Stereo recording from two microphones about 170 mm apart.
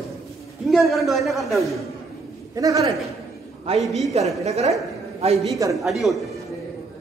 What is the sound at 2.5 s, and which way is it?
Speech, 20° right (ahead or behind).